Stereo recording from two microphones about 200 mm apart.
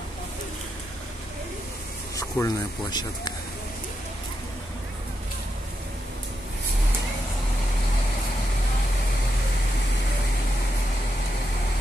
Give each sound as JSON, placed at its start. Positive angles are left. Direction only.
{"t": 2.1, "sound": "speech", "side_deg": 15}